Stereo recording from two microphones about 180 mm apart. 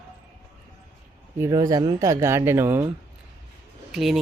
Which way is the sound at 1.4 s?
20° right (ahead or behind).